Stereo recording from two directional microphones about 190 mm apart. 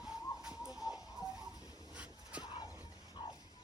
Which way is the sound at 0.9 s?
20° left (ahead or behind).